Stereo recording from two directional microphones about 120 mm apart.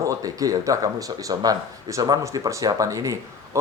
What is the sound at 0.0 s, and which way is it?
Speech, 30° right (ahead or behind).